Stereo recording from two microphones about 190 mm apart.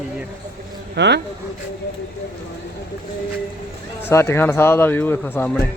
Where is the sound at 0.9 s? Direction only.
65° right (ahead or behind).